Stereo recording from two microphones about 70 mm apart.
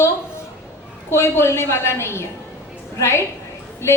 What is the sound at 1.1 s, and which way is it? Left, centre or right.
A woman's voice, left.